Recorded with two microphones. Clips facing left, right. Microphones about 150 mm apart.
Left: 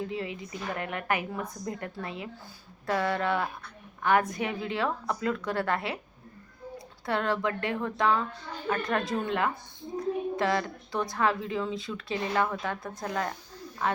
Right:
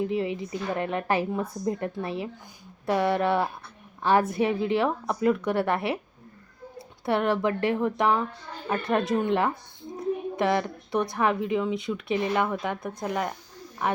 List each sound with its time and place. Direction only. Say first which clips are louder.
0.0 s a woman's voice: right 7 dB; 25° right (ahead or behind)
7.0 s a woman's voice: right 4 dB; 25° right (ahead or behind)
10.0 s a sound: right 2 dB; 20° right (ahead or behind)
11.1 s a woman's voice: right 1 dB; 20° right (ahead or behind)